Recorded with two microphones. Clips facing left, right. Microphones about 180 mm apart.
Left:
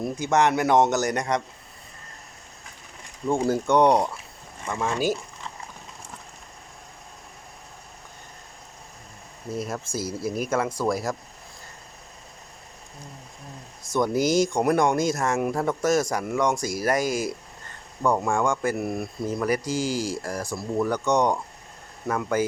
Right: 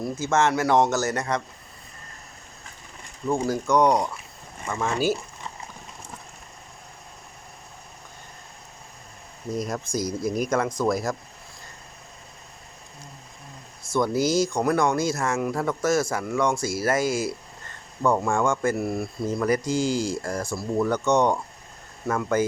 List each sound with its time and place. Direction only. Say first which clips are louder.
0.0 s speech: left 1 dB; 20° left (ahead or behind)
3.4 s speech: left 2 dB; 30° left (ahead or behind)
9.5 s speech: right 2 dB; 5° left (ahead or behind)
13.9 s speech: left 1 dB; 15° left (ahead or behind); by 20.9 s centre (ahead or behind)
20.9 s speech: right 1 dB; 15° left (ahead or behind)